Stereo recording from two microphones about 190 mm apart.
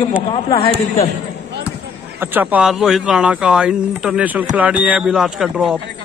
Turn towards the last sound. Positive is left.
turn(degrees=0)  # may be behind; listen again after turning